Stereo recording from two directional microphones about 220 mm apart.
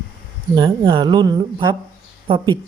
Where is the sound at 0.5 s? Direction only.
20° right (ahead or behind).